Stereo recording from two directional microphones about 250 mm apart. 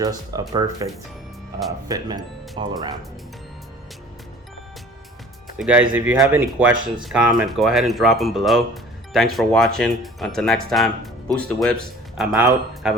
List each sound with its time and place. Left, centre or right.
0.0 s speech: centre
1.9 s speech: centre
5.5 s speech: centre
12.3 s speech: centre